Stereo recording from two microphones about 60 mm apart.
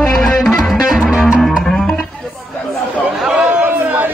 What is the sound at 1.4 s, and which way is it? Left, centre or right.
Music, centre.